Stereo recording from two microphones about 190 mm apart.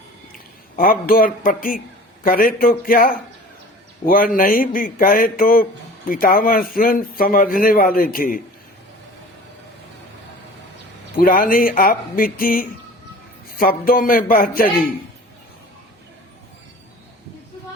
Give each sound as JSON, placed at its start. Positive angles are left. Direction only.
{"t": 0.3, "sound": "a man's voice", "side_deg": 50}
{"t": 11.2, "sound": "a man's voice", "side_deg": 50}